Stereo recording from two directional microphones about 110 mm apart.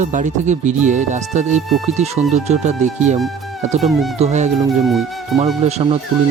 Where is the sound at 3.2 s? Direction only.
Centre (ahead or behind).